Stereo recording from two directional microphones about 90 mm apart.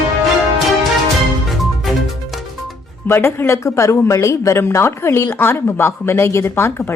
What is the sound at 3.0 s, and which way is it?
A woman's voice, 25° left (ahead or behind).